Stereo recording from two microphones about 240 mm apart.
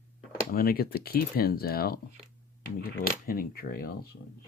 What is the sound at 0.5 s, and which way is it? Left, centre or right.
Speech, left.